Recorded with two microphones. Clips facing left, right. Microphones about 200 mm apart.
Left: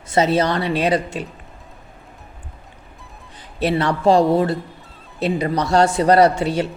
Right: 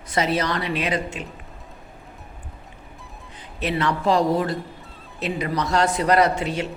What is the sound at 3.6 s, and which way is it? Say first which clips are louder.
A woman's voice: left 5 dB; 35° left (ahead or behind).